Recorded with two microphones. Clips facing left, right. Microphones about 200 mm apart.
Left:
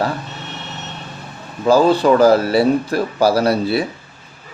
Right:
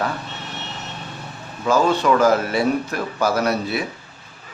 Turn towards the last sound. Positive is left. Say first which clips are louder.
# left 5 dB
turn(degrees=30)  # may be behind; listen again after turning